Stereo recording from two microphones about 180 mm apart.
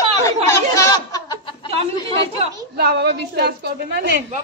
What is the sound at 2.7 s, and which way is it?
A woman's voice, 65° right (ahead or behind).